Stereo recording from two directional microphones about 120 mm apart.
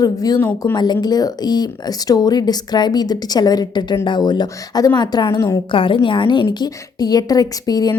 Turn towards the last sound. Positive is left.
turn(degrees=35)  # may be behind; listen again after turning